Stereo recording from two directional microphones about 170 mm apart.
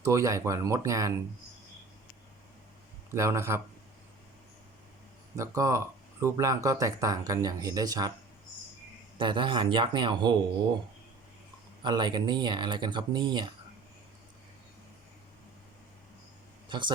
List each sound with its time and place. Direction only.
0.0 s speech: 20° right (ahead or behind)
3.1 s speech: 15° right (ahead or behind)
5.4 s speech: 20° right (ahead or behind)
9.1 s speech: 30° right (ahead or behind)
11.8 s speech: 25° right (ahead or behind)
16.6 s speech: 25° right (ahead or behind)